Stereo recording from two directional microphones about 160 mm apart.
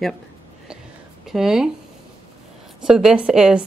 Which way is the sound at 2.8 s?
5° right (ahead or behind).